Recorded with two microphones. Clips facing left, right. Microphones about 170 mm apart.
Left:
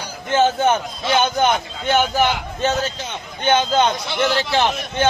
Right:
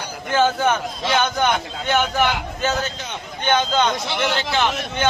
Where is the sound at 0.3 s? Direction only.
25° left (ahead or behind).